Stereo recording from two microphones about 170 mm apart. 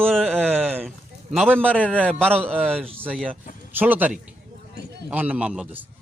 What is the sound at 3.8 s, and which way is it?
A man's voice, 10° right (ahead or behind).